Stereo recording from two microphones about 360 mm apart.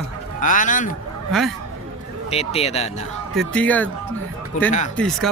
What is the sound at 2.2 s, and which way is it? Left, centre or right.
Speech, centre.